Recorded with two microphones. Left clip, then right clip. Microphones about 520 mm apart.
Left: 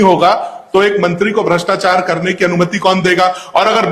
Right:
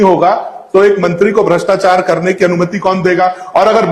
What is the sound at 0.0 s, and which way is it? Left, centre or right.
A man's voice, left.